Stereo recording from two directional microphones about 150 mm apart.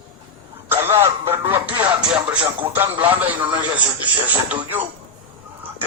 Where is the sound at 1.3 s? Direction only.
15° right (ahead or behind).